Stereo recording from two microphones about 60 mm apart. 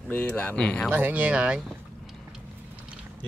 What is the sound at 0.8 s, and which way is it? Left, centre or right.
Speech, right.